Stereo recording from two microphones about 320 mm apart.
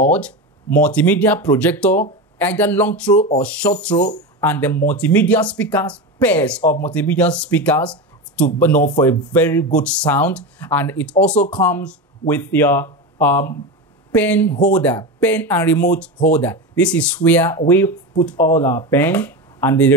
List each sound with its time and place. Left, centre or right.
0.1 s speech: centre